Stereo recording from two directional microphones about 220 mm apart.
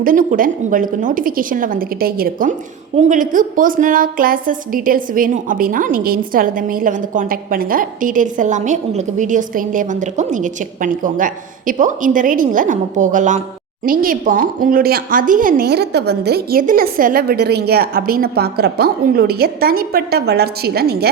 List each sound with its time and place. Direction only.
0.0 s a woman's voice: 40° right (ahead or behind)